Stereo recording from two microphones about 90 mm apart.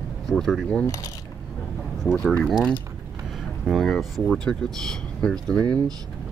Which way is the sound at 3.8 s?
Centre (ahead or behind).